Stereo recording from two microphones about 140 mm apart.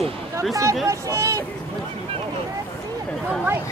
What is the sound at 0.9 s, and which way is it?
Speech, 20° right (ahead or behind).